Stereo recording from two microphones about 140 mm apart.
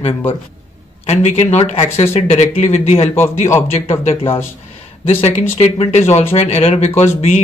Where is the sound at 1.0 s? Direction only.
50° left (ahead or behind).